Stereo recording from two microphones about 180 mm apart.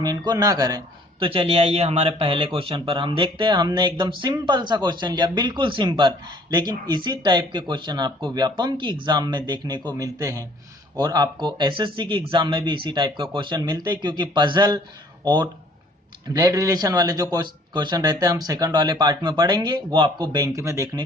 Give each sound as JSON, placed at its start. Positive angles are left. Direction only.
{"t": 0.0, "sound": "speech", "side_deg": -20}